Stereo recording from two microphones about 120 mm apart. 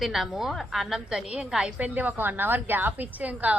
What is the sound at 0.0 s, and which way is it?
A woman's voice, centre (ahead or behind).